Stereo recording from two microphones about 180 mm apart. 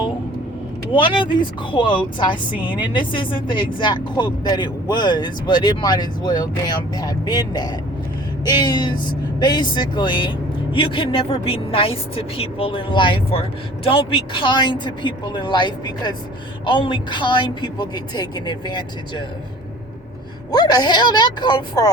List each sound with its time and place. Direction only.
0.9 s a woman's voice: 25° left (ahead or behind)
20.5 s a woman's voice: 20° left (ahead or behind)